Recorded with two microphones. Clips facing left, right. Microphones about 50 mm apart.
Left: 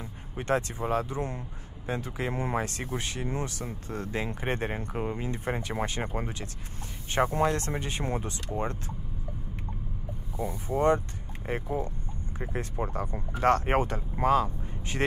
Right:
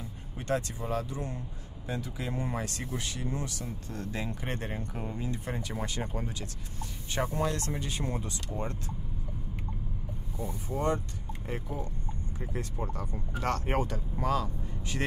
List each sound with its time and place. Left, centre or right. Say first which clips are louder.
0.4 s speech: left 4 dB; left
7.3 s speech: left 4 dB; left
10.7 s speech: left 6 dB; left